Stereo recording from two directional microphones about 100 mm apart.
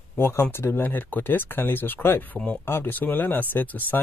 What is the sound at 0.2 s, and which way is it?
Speech, 25° left (ahead or behind).